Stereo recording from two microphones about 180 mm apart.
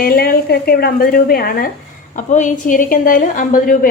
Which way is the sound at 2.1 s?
45° left (ahead or behind).